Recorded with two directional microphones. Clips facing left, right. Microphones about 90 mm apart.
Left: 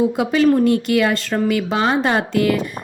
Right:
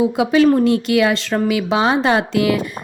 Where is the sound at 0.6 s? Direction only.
90° right.